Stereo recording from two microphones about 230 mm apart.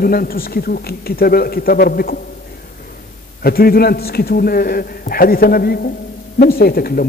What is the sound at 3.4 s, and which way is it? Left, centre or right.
A man's voice, left.